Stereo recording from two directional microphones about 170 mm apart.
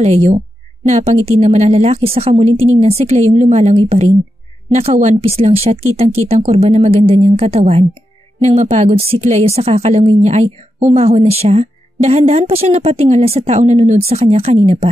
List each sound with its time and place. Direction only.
0.0 s speech: 40° right (ahead or behind)